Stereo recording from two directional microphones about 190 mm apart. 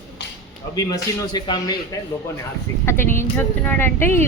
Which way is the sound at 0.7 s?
20° left (ahead or behind).